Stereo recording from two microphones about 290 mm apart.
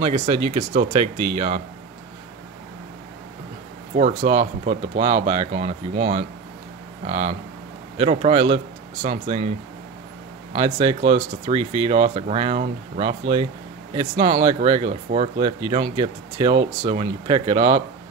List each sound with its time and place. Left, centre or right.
0.0 s speech: centre
3.9 s speech: right
10.5 s speech: centre